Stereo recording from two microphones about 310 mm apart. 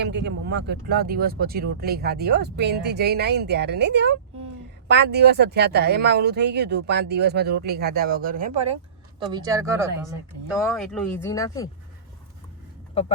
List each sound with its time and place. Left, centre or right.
0.0 s speech: right
9.2 s speech: centre